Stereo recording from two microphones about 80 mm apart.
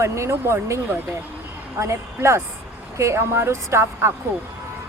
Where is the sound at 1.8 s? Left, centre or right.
Right.